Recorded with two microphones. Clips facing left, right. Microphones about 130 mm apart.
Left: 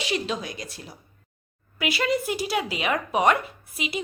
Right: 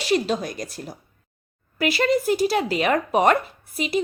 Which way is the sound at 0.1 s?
45° right (ahead or behind).